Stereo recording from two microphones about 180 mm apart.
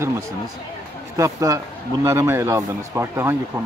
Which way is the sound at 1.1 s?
20° right (ahead or behind).